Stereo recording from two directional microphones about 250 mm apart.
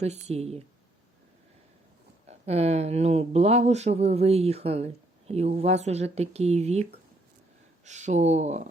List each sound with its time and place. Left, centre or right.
0.0 s speech: right
2.5 s speech: right
7.9 s speech: right